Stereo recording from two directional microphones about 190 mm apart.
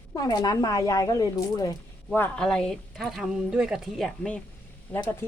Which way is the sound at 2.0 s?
5° left (ahead or behind).